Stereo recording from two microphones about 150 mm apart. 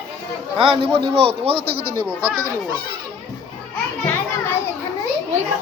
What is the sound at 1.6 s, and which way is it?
Speech, 90° right.